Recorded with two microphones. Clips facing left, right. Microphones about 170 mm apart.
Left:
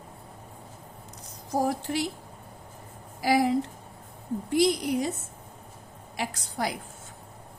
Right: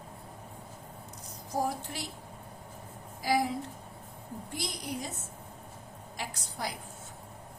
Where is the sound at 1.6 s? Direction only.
85° left.